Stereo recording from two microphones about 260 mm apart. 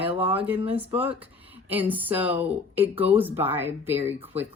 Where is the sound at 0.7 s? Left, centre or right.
Centre.